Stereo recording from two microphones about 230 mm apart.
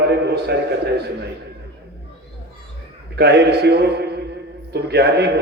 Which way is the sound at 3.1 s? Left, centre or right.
Right.